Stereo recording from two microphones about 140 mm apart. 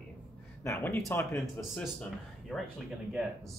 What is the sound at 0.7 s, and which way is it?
Speech, 20° left (ahead or behind).